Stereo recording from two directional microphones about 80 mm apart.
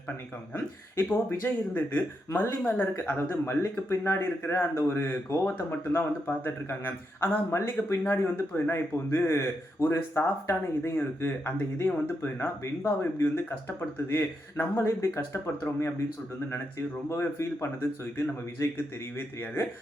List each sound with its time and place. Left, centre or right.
0.5 s speech: left
17.1 s speech: left